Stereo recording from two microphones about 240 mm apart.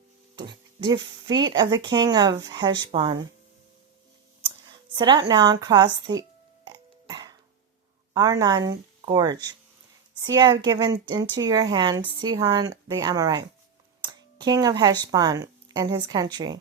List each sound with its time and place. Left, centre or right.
0.3 s speech: centre
4.9 s speech: centre
6.7 s burping: centre
8.1 s speech: centre